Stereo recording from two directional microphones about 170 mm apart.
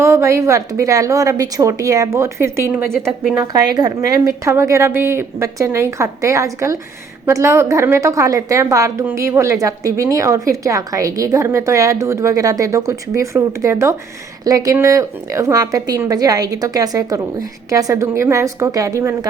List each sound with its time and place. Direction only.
0.0 s a woman's voice: 15° right (ahead or behind)